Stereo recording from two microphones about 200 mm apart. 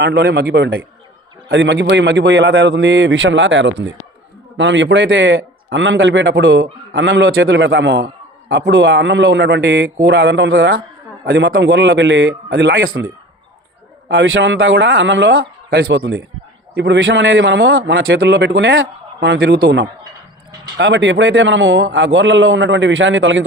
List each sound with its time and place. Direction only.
0.0 s a man's voice: 55° right (ahead or behind); by 13.1 s 75° right (ahead or behind)
14.1 s a man's voice: 75° right (ahead or behind)
18.2 s a man's voice: 60° right (ahead or behind)